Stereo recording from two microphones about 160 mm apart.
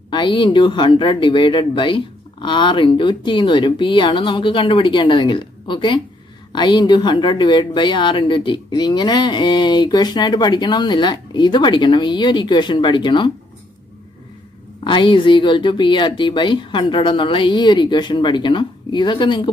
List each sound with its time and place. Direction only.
0.1 s speech: 30° left (ahead or behind)
14.8 s speech: 30° left (ahead or behind)